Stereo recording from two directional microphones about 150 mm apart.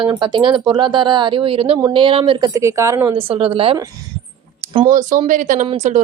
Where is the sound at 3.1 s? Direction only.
40° right (ahead or behind).